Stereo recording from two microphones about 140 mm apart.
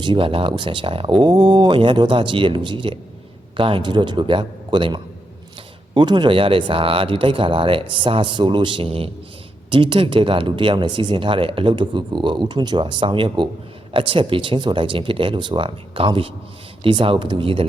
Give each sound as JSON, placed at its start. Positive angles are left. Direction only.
{"t": 0.0, "sound": "speech", "side_deg": -35}